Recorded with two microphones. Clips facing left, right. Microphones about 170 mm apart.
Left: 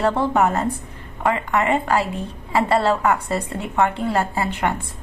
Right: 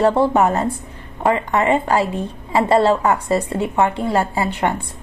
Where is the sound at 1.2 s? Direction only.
25° right (ahead or behind).